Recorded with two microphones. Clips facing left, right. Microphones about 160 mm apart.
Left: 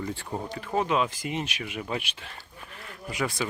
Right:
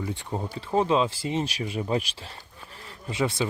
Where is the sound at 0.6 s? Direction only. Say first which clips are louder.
Right 3 dB; 30° right (ahead or behind).